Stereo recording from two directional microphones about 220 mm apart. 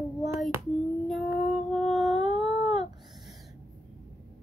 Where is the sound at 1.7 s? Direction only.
Centre (ahead or behind).